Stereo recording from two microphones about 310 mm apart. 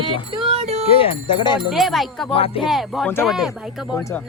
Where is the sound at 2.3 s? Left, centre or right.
Centre.